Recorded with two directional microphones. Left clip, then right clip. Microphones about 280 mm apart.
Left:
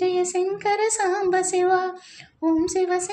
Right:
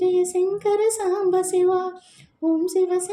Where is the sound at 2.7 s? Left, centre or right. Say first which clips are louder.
Right 1 dB; left.